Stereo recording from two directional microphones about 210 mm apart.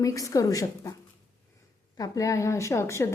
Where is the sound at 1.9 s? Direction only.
15° left (ahead or behind).